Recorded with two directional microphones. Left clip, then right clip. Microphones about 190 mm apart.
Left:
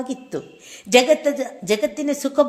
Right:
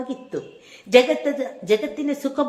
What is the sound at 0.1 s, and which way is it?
A woman's voice, 40° left (ahead or behind).